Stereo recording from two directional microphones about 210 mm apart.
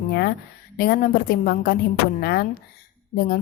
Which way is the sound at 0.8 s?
45° left (ahead or behind).